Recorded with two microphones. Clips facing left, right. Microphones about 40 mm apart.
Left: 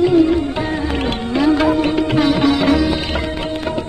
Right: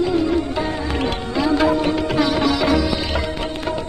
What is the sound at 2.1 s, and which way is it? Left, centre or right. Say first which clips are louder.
Sitar: left 4 dB; left.